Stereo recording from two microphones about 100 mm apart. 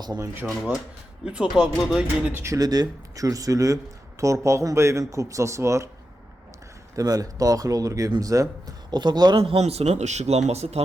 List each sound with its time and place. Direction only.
0.4 s speech: centre (ahead or behind)
2.3 s speech: 25° right (ahead or behind)
2.6 s speech: 40° right (ahead or behind)
6.9 s speech: 35° right (ahead or behind)
9.4 s speech: 85° right